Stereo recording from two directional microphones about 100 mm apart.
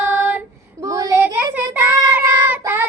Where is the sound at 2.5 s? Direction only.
20° right (ahead or behind).